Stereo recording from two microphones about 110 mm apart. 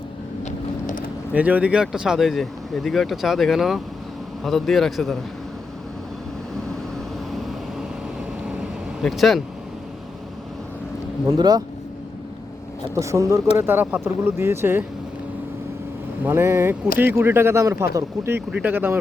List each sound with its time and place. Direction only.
1.3 s speech: 15° right (ahead or behind)
9.0 s speech: centre (ahead or behind)
11.3 s speech: 35° right (ahead or behind)
12.9 s speech: 25° right (ahead or behind)
16.2 s speech: 20° right (ahead or behind)